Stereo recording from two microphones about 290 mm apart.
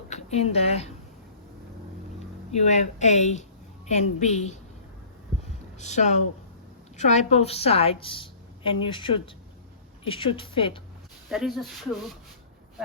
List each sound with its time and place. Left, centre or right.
0.1 s a woman's voice: left
2.1 s a woman's voice: left
5.8 s a woman's voice: left
11.3 s speech: centre